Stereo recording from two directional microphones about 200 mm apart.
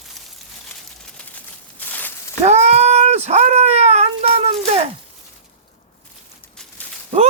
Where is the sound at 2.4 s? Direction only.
35° right (ahead or behind).